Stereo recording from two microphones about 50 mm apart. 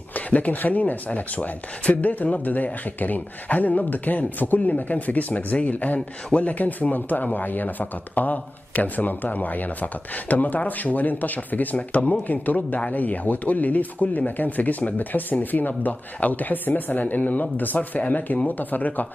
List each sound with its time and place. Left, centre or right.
0.1 s speech: left